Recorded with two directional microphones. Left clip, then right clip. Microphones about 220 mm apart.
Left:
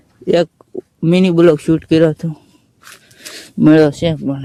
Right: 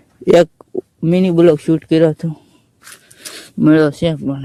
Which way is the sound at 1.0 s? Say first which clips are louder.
Left 1 dB; 5° left (ahead or behind).